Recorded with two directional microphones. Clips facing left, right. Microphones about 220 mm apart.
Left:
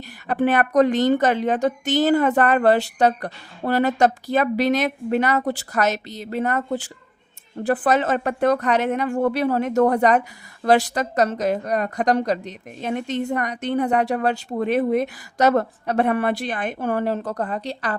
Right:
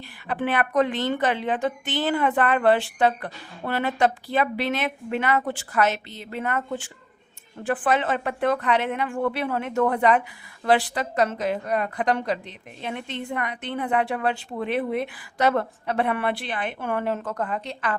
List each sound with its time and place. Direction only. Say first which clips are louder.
0.3 s speech: left 5 dB; 45° left (ahead or behind)